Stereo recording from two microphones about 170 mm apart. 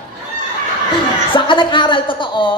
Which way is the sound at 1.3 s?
30° left (ahead or behind).